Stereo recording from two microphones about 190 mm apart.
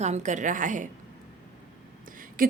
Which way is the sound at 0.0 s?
40° right (ahead or behind).